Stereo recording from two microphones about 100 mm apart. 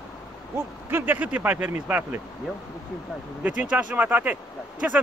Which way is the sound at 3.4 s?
15° right (ahead or behind).